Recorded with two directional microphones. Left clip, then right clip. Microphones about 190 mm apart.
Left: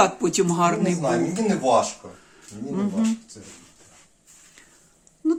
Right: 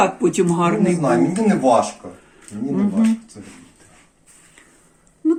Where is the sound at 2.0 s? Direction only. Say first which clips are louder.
Right 5 dB; 15° left (ahead or behind).